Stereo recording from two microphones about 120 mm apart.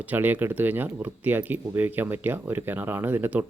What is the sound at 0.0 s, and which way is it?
Speech, 15° right (ahead or behind).